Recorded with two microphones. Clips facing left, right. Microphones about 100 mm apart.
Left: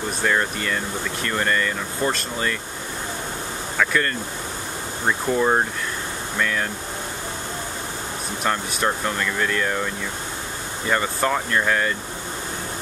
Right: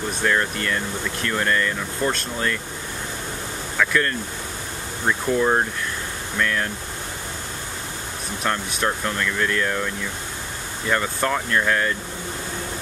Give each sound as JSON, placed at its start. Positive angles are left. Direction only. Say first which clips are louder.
{"t": 0.2, "sound": "speech", "louder": "even", "side_deg": 5}
{"t": 3.7, "sound": "speech", "louder": "right 1 dB", "side_deg": 5}
{"t": 8.5, "sound": "speech", "louder": "left 1 dB", "side_deg": 5}
{"t": 10.9, "sound": "speech", "louder": "left 1 dB", "side_deg": 5}